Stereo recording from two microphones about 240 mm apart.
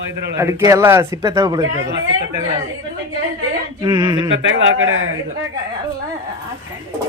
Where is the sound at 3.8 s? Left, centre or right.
Centre.